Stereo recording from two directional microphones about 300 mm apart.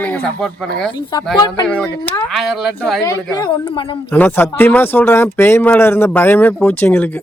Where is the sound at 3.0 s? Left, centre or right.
Centre.